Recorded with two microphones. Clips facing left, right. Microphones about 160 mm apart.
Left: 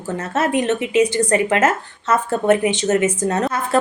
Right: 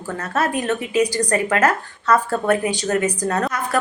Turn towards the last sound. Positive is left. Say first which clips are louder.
# left 2 dB
turn(degrees=25)  # may be behind; listen again after turning